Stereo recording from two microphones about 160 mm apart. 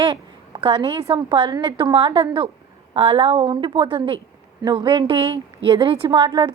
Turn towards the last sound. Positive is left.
turn(degrees=-30)  # may be behind; listen again after turning